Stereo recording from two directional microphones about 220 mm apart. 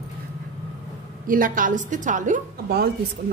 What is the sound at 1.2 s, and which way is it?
A woman's voice, 40° right (ahead or behind).